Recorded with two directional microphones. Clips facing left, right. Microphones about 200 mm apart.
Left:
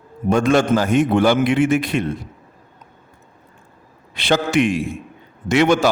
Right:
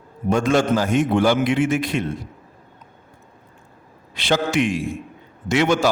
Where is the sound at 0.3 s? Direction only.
60° left (ahead or behind).